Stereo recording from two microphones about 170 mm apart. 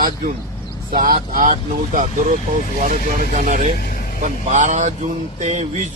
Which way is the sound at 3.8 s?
60° left (ahead or behind).